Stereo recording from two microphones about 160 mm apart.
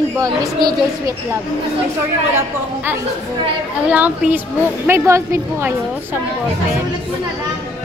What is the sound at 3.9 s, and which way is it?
A woman's voice, 10° right (ahead or behind).